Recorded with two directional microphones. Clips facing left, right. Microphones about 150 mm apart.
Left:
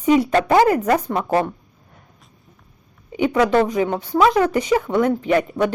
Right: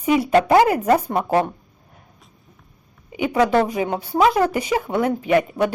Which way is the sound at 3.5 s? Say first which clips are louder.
Left 2 dB; 10° right (ahead or behind).